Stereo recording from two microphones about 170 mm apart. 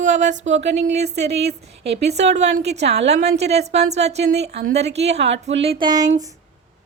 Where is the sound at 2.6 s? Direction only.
80° right.